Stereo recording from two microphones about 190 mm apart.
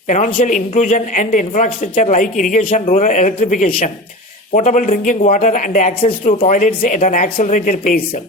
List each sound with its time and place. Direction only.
0.1 s a woman's voice: 45° left (ahead or behind)